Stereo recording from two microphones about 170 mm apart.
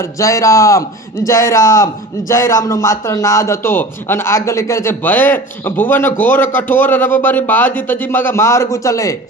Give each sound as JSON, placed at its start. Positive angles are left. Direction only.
{"t": 0.0, "sound": "a man's voice", "side_deg": 20}